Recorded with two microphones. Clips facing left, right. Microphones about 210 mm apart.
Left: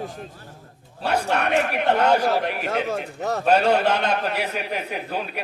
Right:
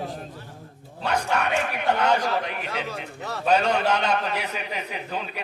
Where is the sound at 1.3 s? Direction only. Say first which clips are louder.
Left 4 dB; 60° left (ahead or behind).